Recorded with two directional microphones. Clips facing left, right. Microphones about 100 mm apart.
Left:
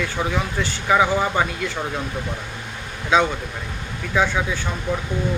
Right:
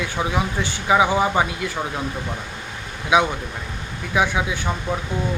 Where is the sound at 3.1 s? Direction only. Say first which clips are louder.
Even; 15° right (ahead or behind).